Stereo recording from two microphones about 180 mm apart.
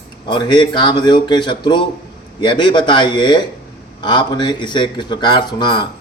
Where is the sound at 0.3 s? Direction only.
25° left (ahead or behind).